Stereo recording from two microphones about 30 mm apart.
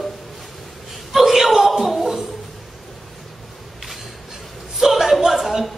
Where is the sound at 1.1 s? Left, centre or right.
Centre.